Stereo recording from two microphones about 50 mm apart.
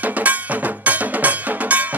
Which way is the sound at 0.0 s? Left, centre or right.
Right.